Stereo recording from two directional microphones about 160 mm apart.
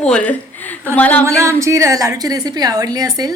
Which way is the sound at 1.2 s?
15° right (ahead or behind).